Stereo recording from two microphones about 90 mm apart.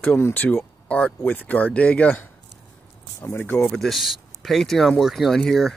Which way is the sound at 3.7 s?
Centre (ahead or behind).